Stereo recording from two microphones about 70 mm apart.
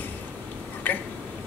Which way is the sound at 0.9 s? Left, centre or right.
Left.